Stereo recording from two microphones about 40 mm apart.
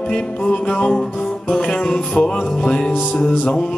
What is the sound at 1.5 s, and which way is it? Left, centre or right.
Music, centre.